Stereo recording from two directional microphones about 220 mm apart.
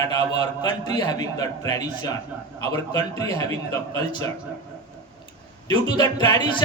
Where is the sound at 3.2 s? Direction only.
15° left (ahead or behind).